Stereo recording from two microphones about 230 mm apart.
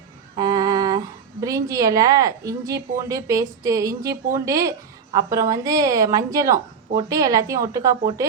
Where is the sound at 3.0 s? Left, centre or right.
Centre.